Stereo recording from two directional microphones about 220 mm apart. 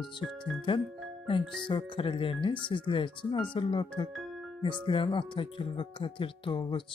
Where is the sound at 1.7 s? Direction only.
25° left (ahead or behind).